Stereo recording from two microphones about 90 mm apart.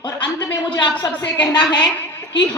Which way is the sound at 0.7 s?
60° left (ahead or behind).